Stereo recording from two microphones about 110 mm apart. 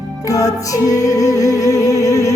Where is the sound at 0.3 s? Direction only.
30° left (ahead or behind).